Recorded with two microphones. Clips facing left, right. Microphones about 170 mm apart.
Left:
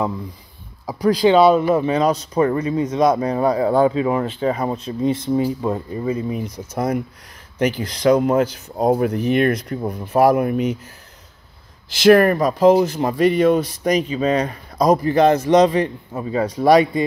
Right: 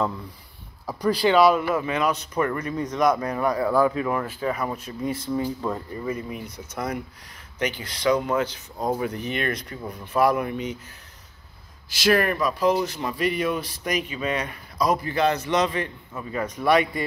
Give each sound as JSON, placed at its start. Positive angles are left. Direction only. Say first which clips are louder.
{"t": 0.8, "sound": "speech", "louder": "left 6 dB", "side_deg": 15}
{"t": 1.3, "sound": "speech", "louder": "left 4 dB", "side_deg": 25}
{"t": 6.7, "sound": "speech", "louder": "left 8 dB", "side_deg": 45}
{"t": 7.7, "sound": "speech", "louder": "left 10 dB", "side_deg": 0}
{"t": 8.0, "sound": "speech", "louder": "left 7 dB", "side_deg": 45}
{"t": 8.7, "sound": "speech", "louder": "left 9 dB", "side_deg": 60}
{"t": 11.9, "sound": "speech", "louder": "left 9 dB", "side_deg": 55}